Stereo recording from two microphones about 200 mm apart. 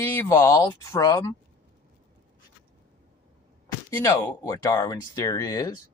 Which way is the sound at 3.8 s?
15° left (ahead or behind).